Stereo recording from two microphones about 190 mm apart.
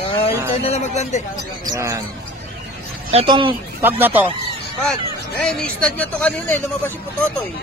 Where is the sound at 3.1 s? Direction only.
30° right (ahead or behind).